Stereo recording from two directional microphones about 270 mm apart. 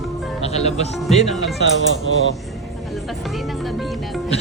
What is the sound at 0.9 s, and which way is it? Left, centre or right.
Speech, centre.